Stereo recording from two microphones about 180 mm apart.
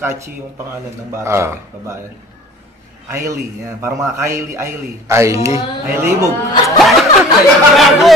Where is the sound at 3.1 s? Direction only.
15° right (ahead or behind).